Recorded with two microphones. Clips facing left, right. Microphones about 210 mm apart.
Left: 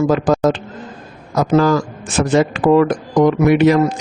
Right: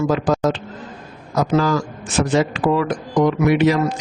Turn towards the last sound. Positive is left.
turn(degrees=55)  # may be behind; listen again after turning